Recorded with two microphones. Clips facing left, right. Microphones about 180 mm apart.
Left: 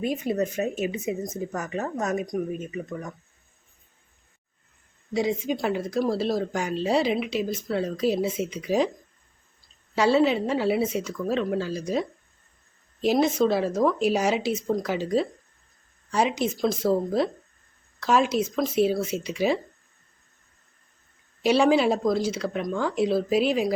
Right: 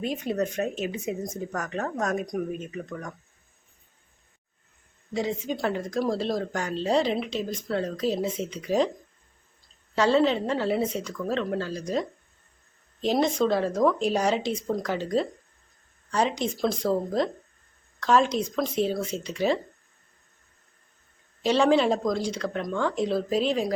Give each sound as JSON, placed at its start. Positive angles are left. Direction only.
{"t": 0.0, "sound": "a woman's voice", "side_deg": 5}
{"t": 5.1, "sound": "a woman's voice", "side_deg": 10}
{"t": 9.9, "sound": "a woman's voice", "side_deg": 10}
{"t": 21.4, "sound": "a woman's voice", "side_deg": 10}